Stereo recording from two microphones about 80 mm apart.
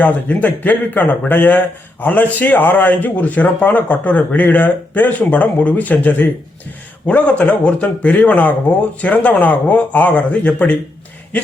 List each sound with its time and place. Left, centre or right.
0.0 s a man's voice: centre